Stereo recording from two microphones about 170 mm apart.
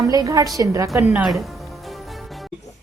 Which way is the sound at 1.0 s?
Centre (ahead or behind).